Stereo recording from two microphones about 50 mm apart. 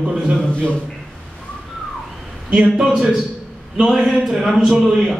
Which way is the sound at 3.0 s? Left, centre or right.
Centre.